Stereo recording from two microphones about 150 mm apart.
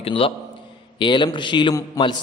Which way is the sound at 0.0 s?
35° left (ahead or behind).